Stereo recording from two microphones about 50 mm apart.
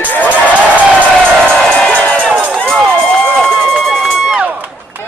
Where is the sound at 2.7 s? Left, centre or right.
Centre.